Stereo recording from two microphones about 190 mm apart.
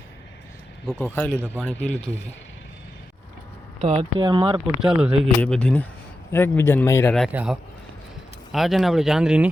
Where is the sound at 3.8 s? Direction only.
30° right (ahead or behind).